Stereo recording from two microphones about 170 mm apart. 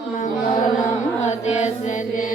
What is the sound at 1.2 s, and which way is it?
Music, 40° left (ahead or behind).